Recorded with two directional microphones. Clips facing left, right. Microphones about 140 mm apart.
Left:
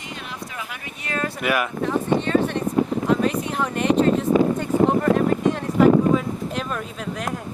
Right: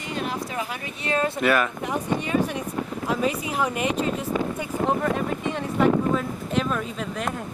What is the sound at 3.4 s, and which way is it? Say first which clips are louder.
Speech: left 3 dB; 5° right (ahead or behind).